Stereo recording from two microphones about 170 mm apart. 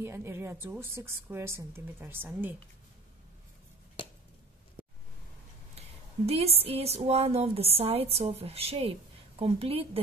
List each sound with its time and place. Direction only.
0.0 s speech: 15° right (ahead or behind)
6.2 s a woman's voice: 35° right (ahead or behind)